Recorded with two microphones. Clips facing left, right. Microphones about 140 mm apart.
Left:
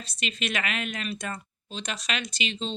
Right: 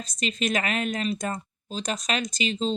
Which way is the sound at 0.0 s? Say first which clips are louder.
Right 5 dB; 40° right (ahead or behind).